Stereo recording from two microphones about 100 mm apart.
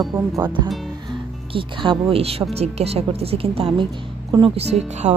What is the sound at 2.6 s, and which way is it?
A woman's voice, 90° right.